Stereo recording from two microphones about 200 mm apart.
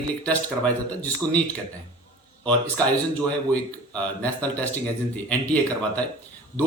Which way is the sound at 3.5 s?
5° left (ahead or behind).